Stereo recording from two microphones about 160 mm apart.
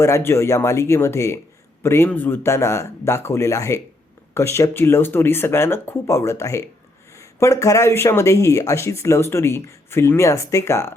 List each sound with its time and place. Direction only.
0.0 s speech: 15° left (ahead or behind)